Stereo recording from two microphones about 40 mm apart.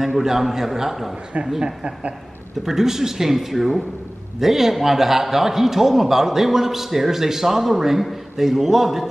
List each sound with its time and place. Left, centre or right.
0.0 s a man's voice: centre